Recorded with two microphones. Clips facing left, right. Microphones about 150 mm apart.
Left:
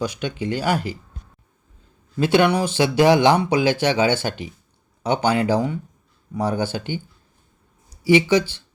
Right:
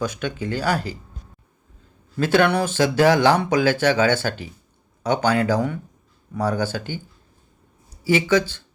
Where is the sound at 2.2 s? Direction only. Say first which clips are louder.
Left 1 dB; 15° left (ahead or behind).